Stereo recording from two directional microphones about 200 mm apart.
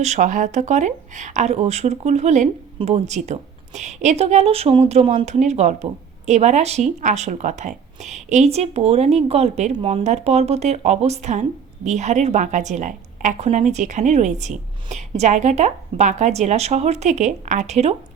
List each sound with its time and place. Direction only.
0.0 s a woman's voice: 35° right (ahead or behind)